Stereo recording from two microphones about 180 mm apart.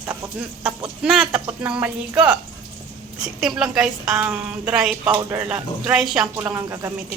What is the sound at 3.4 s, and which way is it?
A woman's voice, 5° right (ahead or behind).